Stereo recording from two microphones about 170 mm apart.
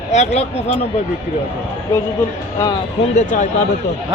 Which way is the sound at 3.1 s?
50° left (ahead or behind).